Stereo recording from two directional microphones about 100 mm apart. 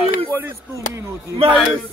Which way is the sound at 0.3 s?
25° right (ahead or behind).